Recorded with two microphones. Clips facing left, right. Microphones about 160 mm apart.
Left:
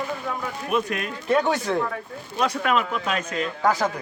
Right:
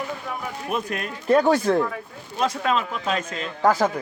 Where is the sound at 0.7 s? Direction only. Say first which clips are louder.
Left 3 dB; 40° right (ahead or behind).